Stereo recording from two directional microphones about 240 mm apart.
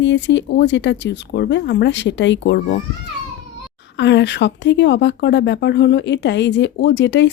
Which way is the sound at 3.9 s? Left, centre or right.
Left.